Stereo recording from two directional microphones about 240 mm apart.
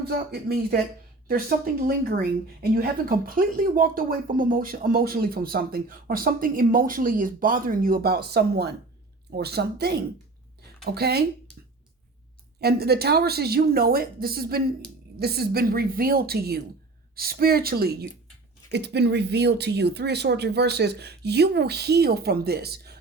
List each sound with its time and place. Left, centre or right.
0.2 s speech: right
12.5 s speech: right